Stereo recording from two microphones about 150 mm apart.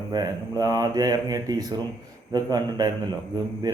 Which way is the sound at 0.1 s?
25° right (ahead or behind).